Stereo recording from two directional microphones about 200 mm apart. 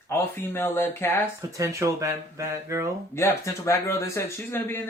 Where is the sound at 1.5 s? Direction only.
15° right (ahead or behind).